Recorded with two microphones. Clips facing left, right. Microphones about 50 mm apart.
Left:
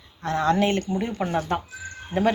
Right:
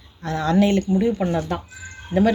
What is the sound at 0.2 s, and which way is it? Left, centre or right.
Speech, left.